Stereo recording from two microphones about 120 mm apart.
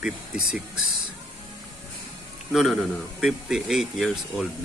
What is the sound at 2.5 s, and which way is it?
Speech, 5° right (ahead or behind).